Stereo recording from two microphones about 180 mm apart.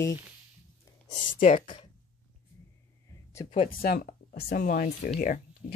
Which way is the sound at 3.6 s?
55° left (ahead or behind).